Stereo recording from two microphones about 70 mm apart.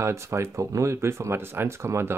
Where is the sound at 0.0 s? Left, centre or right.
Right.